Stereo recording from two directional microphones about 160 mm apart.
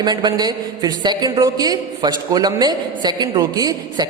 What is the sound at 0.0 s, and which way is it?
A man's voice, 25° right (ahead or behind).